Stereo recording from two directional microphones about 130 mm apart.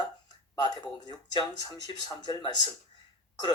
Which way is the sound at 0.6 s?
30° left (ahead or behind).